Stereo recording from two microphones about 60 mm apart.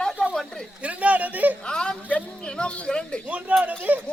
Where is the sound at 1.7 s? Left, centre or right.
Centre.